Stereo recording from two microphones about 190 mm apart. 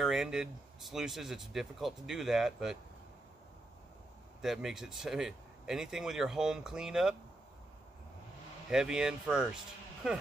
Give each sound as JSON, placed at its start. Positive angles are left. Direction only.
{"t": 0.0, "sound": "speech", "side_deg": -5}
{"t": 4.4, "sound": "speech", "side_deg": 0}
{"t": 8.6, "sound": "speech", "side_deg": -5}